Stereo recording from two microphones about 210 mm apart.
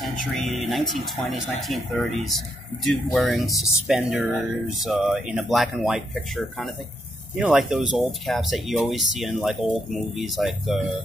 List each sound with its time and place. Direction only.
0.0 s speech: centre (ahead or behind)